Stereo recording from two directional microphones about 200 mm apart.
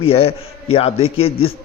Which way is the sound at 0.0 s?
30° left (ahead or behind).